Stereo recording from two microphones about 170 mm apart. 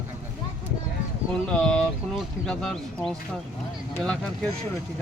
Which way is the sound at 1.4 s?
5° left (ahead or behind).